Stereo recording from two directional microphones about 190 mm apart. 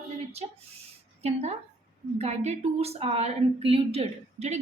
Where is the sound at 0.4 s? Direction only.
30° right (ahead or behind).